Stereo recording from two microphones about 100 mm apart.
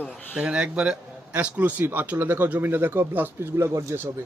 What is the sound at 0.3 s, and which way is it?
A man's voice, 10° right (ahead or behind).